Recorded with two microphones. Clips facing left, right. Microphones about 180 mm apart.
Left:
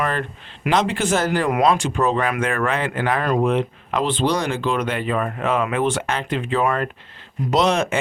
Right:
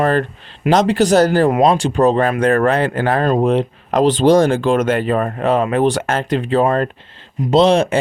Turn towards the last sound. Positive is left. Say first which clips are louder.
# right 6 dB
turn(degrees=-30)  # may be behind; listen again after turning